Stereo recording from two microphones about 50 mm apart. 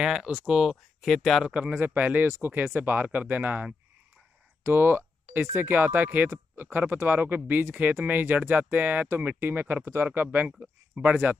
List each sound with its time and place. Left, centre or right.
0.0 s speech: centre
1.0 s speech: centre
2.0 s speech: right
2.2 s speech: right
2.5 s speech: right
4.6 s speech: right